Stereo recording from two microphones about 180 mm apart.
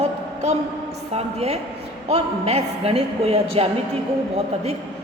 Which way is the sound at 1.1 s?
35° right (ahead or behind).